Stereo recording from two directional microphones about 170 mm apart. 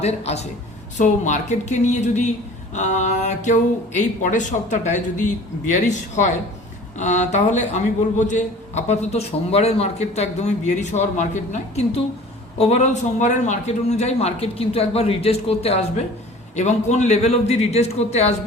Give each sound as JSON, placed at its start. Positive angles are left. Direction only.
{"t": 0.0, "sound": "a man's voice", "side_deg": 40}